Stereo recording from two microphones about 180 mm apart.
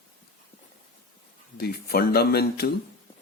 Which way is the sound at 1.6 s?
60° left (ahead or behind).